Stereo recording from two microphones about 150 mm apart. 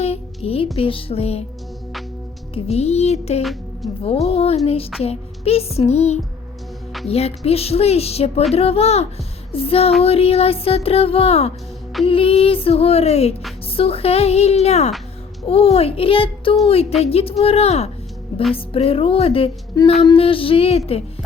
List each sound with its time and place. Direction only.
0.0 s music: 40° left (ahead or behind)
0.8 s speech: 35° left (ahead or behind)
2.6 s a woman's voice: 45° left (ahead or behind)